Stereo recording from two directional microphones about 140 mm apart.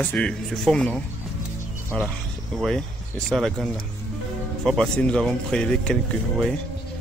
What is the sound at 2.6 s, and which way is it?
Speech, 5° left (ahead or behind).